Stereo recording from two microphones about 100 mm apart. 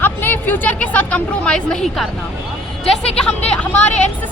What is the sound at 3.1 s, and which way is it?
Speech, 10° left (ahead or behind).